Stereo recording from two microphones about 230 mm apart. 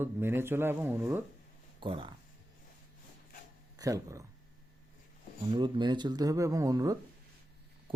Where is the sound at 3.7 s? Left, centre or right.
Centre.